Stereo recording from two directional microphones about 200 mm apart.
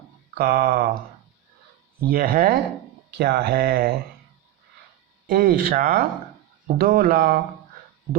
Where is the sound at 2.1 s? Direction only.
45° right (ahead or behind).